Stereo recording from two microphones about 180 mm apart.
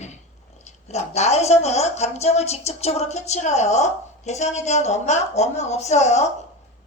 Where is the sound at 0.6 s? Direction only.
35° left (ahead or behind).